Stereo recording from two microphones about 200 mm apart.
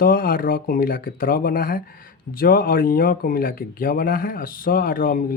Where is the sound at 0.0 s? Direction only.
45° left (ahead or behind).